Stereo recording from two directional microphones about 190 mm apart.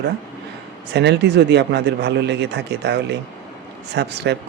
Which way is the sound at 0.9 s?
65° right (ahead or behind).